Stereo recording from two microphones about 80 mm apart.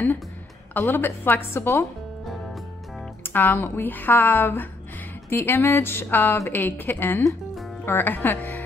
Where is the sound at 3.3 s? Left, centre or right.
Left.